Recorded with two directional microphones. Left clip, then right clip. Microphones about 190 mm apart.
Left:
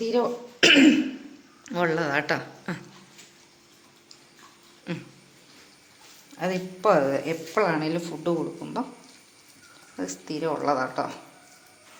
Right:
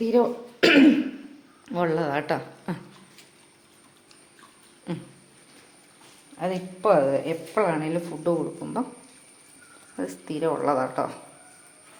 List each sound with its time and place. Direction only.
0.0 s speech: 15° right (ahead or behind)
4.9 s speech: 10° right (ahead or behind)
6.3 s speech: 5° right (ahead or behind)
10.0 s speech: 20° right (ahead or behind)